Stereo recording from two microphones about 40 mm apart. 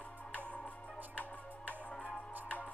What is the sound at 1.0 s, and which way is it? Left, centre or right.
Music, right.